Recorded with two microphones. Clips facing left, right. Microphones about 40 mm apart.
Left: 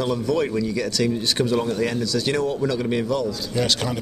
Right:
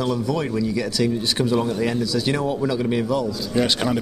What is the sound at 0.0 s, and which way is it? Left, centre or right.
A man's voice, centre.